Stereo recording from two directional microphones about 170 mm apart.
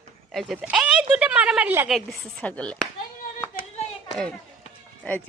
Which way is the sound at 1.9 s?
Centre (ahead or behind).